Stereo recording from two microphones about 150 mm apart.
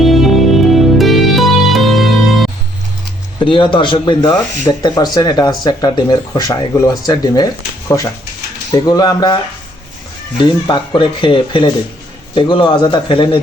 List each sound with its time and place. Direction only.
0.0 s music: centre (ahead or behind)
3.4 s speech: 35° left (ahead or behind)
10.4 s speech: 30° left (ahead or behind)